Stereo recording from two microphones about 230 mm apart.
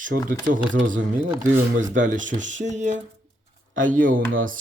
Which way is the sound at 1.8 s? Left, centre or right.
Right.